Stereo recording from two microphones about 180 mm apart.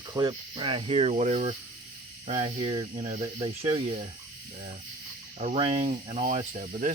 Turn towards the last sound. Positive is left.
turn(degrees=-45)  # may be behind; listen again after turning